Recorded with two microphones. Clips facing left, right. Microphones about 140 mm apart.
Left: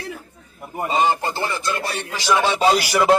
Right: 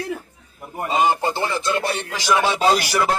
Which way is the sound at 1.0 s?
15° right (ahead or behind).